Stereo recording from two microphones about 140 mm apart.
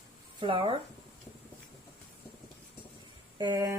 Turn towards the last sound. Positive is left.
turn(degrees=-30)  # may be behind; listen again after turning